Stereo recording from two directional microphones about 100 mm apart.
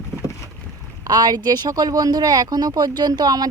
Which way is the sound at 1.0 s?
40° right (ahead or behind).